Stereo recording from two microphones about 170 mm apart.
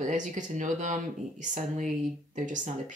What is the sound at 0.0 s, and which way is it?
Speech, 45° right (ahead or behind).